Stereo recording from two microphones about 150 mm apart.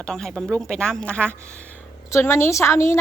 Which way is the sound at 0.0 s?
5° left (ahead or behind).